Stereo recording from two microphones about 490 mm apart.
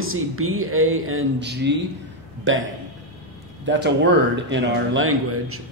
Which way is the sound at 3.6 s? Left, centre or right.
Right.